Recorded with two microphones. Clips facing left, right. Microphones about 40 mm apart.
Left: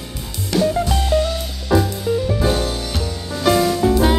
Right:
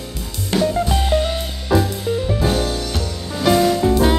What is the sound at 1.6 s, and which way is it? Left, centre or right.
Music, centre.